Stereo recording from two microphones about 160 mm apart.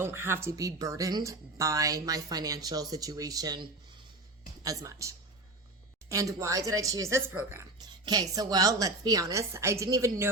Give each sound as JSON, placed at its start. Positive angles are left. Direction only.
{"t": 0.0, "sound": "speech", "side_deg": -15}